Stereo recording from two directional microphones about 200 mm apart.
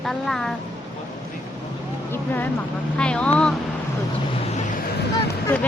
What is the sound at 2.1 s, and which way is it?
Speech, 10° left (ahead or behind).